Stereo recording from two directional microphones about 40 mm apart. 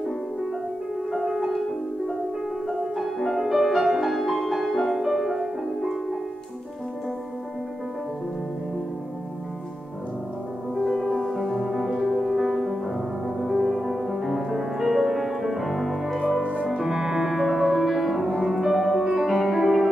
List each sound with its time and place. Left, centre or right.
1.1 s music: centre
2.7 s music: centre
10.8 s music: centre
19.0 s music: centre